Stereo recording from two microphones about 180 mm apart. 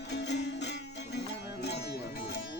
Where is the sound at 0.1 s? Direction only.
70° left (ahead or behind).